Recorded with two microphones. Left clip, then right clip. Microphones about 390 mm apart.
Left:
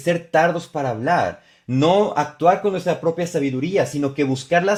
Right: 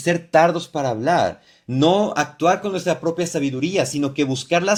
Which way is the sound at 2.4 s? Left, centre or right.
Left.